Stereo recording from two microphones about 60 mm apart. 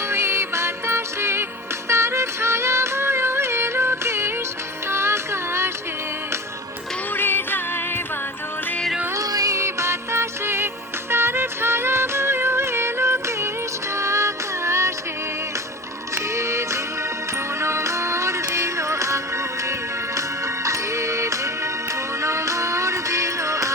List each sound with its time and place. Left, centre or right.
0.1 s music: right
7.1 s music: left
9.1 s music: right
9.6 s music: right
16.1 s music: right
20.7 s music: right